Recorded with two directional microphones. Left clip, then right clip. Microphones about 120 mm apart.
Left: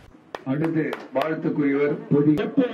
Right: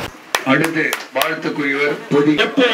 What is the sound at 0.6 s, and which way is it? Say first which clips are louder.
Speech: right 7 dB; 15° right (ahead or behind).